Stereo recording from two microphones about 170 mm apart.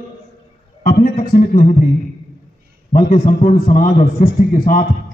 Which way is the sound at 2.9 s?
50° left (ahead or behind).